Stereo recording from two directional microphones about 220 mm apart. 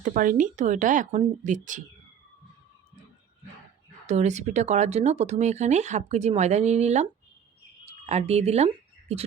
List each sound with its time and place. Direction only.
0.0 s speech: 35° right (ahead or behind)
4.0 s speech: 30° right (ahead or behind)